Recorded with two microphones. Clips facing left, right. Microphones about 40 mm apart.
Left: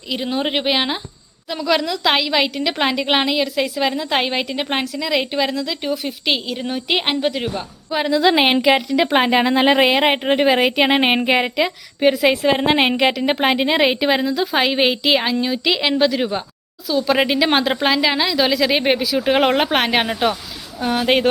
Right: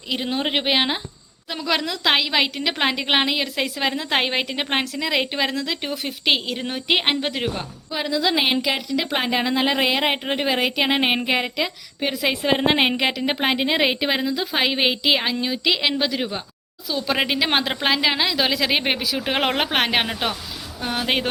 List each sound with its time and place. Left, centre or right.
0.1 s a woman's voice: centre
6.9 s a woman's voice: centre
7.9 s a woman's voice: left
12.1 s a woman's voice: centre